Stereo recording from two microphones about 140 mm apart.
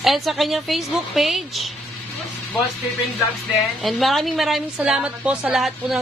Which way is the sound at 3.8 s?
Centre (ahead or behind).